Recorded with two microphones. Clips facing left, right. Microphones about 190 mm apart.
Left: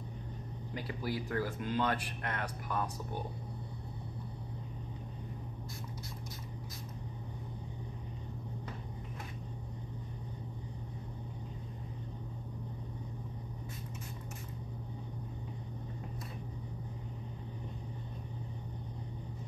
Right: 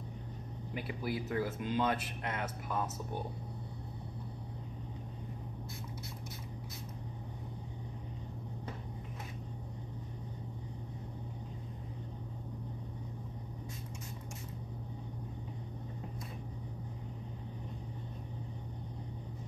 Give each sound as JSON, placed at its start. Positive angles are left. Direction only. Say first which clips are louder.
{"t": 0.7, "sound": "speech", "louder": "even", "side_deg": -20}